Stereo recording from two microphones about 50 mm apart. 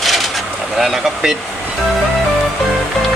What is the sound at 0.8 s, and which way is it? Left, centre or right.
Speech, centre.